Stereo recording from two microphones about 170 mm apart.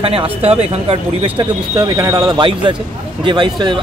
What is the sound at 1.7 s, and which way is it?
Speech, 20° right (ahead or behind).